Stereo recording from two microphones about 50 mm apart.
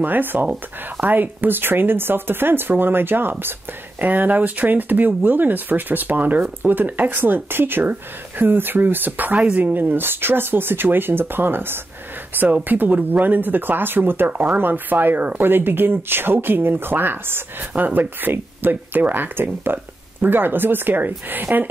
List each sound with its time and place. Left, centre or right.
0.0 s speech: right
12.6 s speech: right